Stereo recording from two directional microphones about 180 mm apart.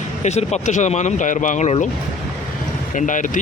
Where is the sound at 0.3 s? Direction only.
40° left (ahead or behind).